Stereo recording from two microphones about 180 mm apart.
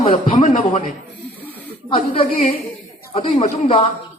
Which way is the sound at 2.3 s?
50° left (ahead or behind).